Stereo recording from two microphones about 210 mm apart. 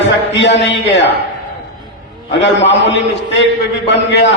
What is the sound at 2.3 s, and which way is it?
A man's voice, 60° left (ahead or behind).